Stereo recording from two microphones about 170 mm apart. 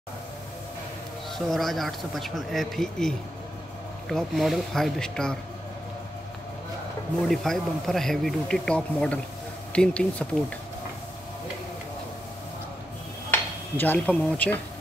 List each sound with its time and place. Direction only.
1.5 s a man's voice: centre (ahead or behind)
7.2 s a man's voice: centre (ahead or behind)
13.3 s speech: 10° left (ahead or behind)